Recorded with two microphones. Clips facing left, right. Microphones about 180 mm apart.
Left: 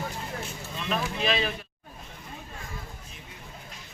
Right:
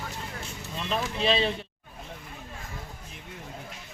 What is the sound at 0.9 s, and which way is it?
Speech, 30° right (ahead or behind).